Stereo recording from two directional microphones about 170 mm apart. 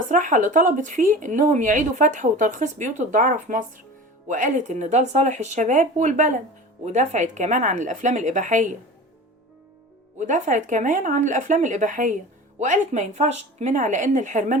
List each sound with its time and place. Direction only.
0.1 s speech: 50° right (ahead or behind)
10.2 s speech: 45° right (ahead or behind)